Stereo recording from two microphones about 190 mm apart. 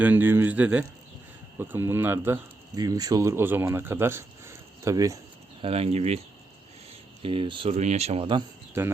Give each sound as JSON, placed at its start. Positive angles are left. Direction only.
{"t": 0.0, "sound": "speech", "side_deg": -10}
{"t": 5.6, "sound": "speech", "side_deg": -30}
{"t": 7.2, "sound": "speech", "side_deg": -25}